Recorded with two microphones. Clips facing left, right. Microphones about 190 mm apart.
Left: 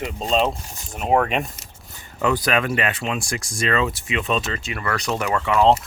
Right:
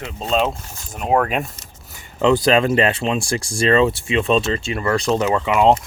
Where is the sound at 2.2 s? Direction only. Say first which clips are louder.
Right 6 dB; 25° right (ahead or behind).